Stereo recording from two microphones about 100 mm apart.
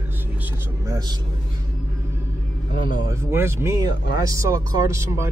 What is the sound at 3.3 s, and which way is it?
Speech, 25° right (ahead or behind).